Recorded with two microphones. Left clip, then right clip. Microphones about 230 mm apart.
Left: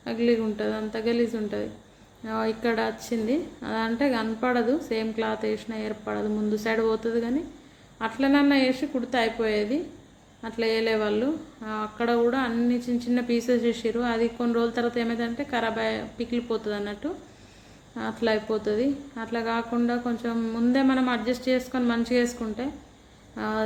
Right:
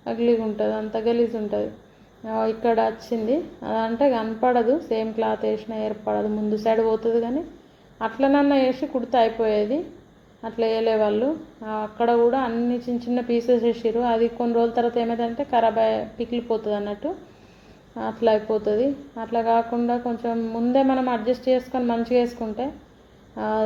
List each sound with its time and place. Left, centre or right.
0.0 s a woman's voice: centre
17.9 s a woman's voice: centre